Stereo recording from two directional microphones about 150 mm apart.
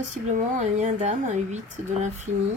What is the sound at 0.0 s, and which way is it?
Speech, 55° right (ahead or behind).